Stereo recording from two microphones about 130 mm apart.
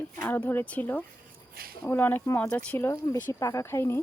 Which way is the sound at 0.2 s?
15° left (ahead or behind).